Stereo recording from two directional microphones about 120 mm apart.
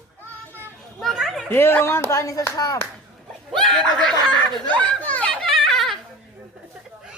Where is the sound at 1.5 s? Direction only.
20° left (ahead or behind).